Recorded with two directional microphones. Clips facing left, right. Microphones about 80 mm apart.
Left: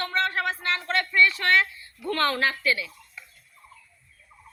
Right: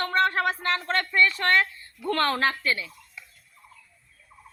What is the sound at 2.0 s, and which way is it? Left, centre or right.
Speech, right.